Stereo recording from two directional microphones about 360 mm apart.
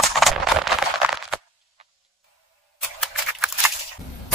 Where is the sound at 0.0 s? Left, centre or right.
Centre.